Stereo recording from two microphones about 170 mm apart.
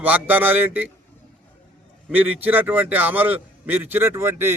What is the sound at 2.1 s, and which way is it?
A man's voice, 10° right (ahead or behind).